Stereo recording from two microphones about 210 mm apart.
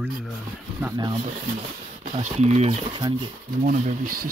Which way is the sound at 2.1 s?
30° right (ahead or behind).